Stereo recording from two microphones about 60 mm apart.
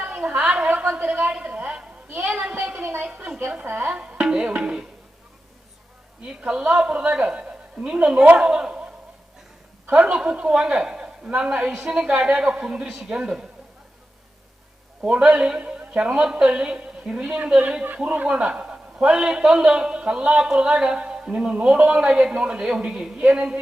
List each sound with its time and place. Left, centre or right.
0.0 s a sound: right
0.3 s a woman's voice: centre; by 3.0 s right
3.0 s a woman's voice: right
3.9 s music: centre
6.4 s a man's voice: centre
9.9 s a man's voice: centre
15.0 s a man's voice: centre